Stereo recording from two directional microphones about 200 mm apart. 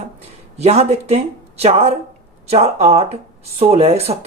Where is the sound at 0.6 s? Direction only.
35° right (ahead or behind).